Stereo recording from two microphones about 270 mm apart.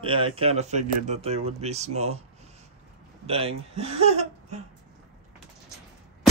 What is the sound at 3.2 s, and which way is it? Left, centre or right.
Speech, right.